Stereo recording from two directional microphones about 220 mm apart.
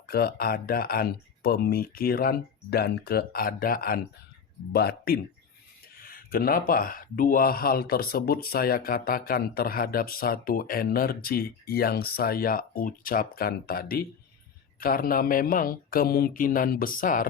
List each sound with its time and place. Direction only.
0.1 s speech: 45° left (ahead or behind)